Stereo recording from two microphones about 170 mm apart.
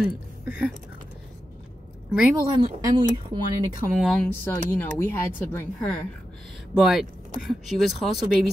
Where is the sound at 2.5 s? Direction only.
25° right (ahead or behind).